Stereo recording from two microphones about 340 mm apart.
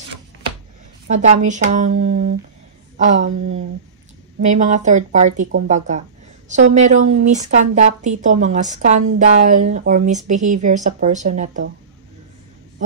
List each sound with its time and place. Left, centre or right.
1.1 s a woman's voice: right
6.7 s a woman's voice: right